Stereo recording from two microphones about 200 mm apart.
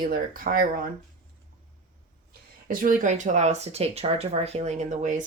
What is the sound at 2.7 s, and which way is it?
Speech, 45° right (ahead or behind).